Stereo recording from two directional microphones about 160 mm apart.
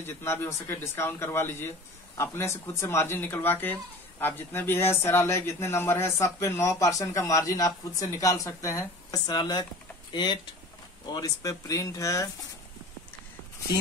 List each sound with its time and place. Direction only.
0.0 s speech: 15° left (ahead or behind)